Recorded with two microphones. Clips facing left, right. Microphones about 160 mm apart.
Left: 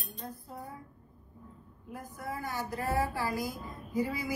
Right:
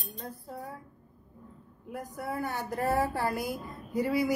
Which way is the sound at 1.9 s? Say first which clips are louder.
Right 4 dB; 65° right (ahead or behind).